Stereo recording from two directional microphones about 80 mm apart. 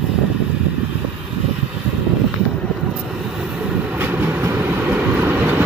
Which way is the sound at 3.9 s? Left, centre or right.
Right.